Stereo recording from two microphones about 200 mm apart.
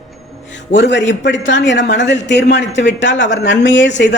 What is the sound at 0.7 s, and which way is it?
Speech, 60° left (ahead or behind).